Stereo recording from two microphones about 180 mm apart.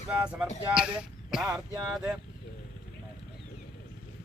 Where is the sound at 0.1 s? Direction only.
5° right (ahead or behind).